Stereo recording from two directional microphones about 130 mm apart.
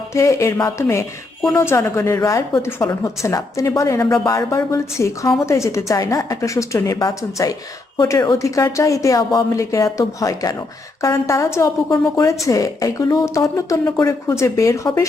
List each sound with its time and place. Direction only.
0.1 s a woman's voice: 25° left (ahead or behind)